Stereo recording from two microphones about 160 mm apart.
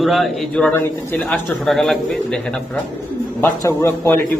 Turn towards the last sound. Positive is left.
turn(degrees=15)  # may be behind; listen again after turning